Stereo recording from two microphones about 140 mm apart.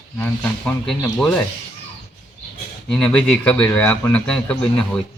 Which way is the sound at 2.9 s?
5° left (ahead or behind).